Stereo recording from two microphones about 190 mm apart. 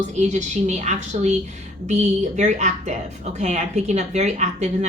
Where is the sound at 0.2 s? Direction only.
40° right (ahead or behind).